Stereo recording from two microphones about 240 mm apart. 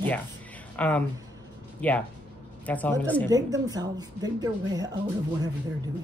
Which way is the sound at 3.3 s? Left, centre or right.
Centre.